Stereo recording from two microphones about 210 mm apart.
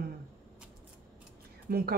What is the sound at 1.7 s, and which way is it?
Speech, 45° right (ahead or behind).